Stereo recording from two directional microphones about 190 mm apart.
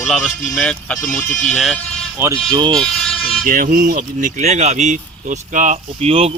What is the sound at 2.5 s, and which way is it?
Speech, 25° right (ahead or behind).